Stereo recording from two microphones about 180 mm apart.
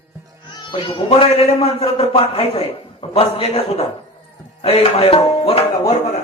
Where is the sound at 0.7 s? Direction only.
30° left (ahead or behind).